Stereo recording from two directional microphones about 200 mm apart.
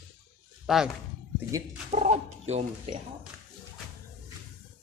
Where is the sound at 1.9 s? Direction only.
35° right (ahead or behind).